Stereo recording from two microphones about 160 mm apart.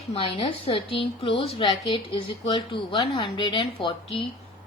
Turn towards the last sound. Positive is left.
turn(degrees=30)  # may be behind; listen again after turning